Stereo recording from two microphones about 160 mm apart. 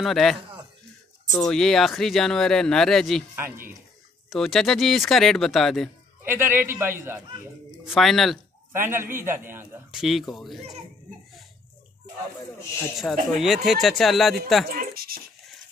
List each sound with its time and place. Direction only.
0.0 s speech: centre (ahead or behind)
1.4 s speech: 5° left (ahead or behind)
4.3 s speech: centre (ahead or behind)
6.2 s a man's voice: 15° right (ahead or behind)
7.8 s speech: centre (ahead or behind)
8.7 s a man's voice: 15° right (ahead or behind)
9.8 s speech: centre (ahead or behind)
13.0 s speech: 5° left (ahead or behind)
14.7 s speech: 65° right (ahead or behind)